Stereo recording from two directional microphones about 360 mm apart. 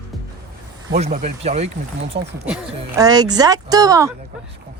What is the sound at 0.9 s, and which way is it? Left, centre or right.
Speech, centre.